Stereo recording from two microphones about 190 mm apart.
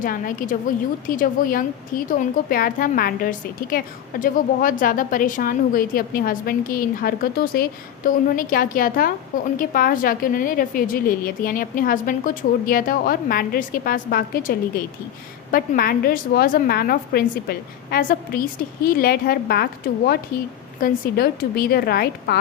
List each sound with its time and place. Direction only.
0.0 s a woman's voice: 45° left (ahead or behind)
15.5 s a woman's voice: 50° left (ahead or behind)